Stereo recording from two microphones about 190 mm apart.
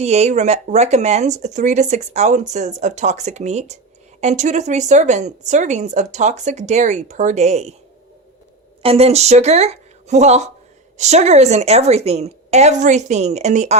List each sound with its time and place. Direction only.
0.0 s speech: 35° right (ahead or behind)
8.8 s speech: 30° right (ahead or behind)